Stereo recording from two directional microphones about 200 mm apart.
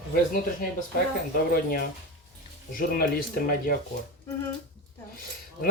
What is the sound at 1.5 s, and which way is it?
Speech, 45° left (ahead or behind).